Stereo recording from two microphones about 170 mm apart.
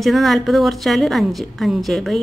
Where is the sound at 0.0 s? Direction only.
Centre (ahead or behind).